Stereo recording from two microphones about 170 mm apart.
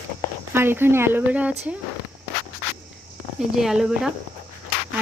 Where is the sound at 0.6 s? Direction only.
15° right (ahead or behind).